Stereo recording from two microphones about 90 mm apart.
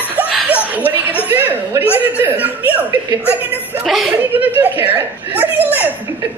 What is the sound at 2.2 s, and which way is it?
A woman's voice, 20° right (ahead or behind).